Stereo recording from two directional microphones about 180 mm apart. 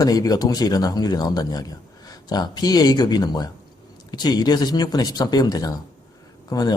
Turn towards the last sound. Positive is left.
turn(degrees=20)  # may be behind; listen again after turning